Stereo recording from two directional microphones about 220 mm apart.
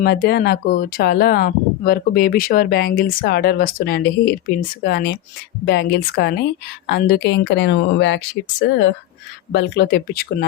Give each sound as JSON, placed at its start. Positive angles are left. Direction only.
{"t": 0.0, "sound": "speech", "side_deg": 45}
{"t": 9.5, "sound": "speech", "side_deg": 50}